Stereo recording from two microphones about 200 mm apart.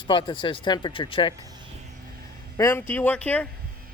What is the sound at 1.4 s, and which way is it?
Speech, 20° right (ahead or behind).